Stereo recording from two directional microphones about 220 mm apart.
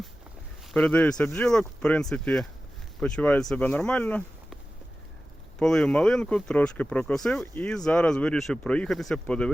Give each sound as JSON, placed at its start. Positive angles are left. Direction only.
{"t": 0.7, "sound": "speech", "side_deg": 5}
{"t": 5.5, "sound": "speech", "side_deg": 5}